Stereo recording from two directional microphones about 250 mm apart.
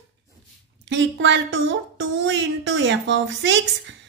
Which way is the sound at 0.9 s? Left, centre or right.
Right.